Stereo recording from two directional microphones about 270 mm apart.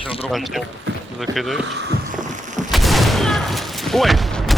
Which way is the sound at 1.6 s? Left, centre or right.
Right.